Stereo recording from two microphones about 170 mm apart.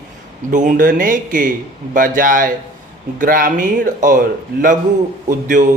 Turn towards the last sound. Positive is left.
turn(degrees=-50)  # may be behind; listen again after turning